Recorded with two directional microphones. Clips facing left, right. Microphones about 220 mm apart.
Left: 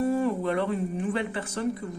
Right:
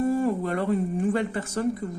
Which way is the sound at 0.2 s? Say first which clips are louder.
Right 1 dB; 45° right (ahead or behind).